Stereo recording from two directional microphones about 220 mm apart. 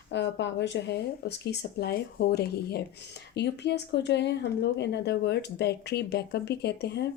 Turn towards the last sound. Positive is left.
turn(degrees=50)  # may be behind; listen again after turning